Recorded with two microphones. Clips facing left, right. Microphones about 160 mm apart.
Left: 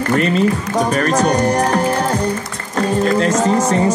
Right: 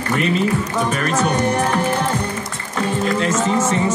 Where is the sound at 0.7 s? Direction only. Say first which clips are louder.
Left 4 dB; 40° left (ahead or behind).